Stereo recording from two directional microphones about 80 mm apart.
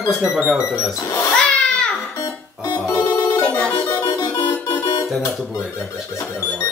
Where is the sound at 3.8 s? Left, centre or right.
Left.